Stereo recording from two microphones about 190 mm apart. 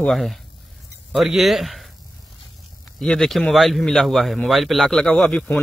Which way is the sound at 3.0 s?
5° left (ahead or behind).